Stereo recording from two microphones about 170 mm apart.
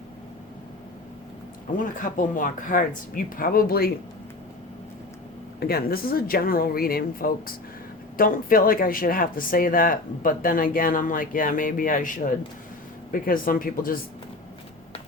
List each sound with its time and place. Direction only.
1.7 s speech: 50° left (ahead or behind)
5.5 s speech: 65° left (ahead or behind)